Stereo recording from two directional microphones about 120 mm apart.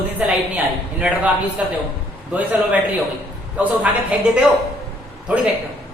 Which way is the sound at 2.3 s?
10° right (ahead or behind).